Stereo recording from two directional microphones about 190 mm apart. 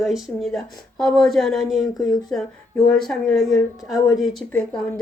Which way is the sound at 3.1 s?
Centre (ahead or behind).